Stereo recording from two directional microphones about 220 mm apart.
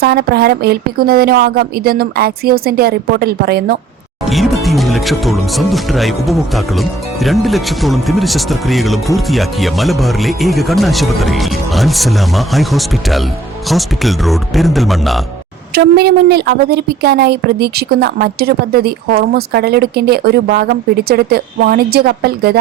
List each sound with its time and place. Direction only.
0.0 s a woman's voice: 45° right (ahead or behind)
4.3 s speech: centre (ahead or behind)
15.7 s a woman's voice: 45° right (ahead or behind)